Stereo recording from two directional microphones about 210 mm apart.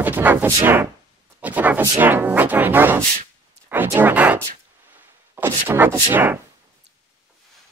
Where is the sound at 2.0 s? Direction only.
10° right (ahead or behind).